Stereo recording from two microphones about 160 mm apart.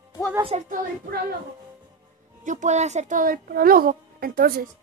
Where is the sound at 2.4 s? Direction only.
50° right (ahead or behind); by 4.6 s 65° right (ahead or behind).